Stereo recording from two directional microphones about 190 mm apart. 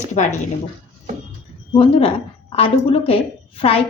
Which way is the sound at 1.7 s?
30° left (ahead or behind).